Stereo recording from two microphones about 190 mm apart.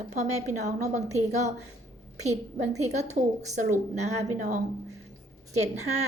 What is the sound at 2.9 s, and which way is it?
Speech, 35° right (ahead or behind).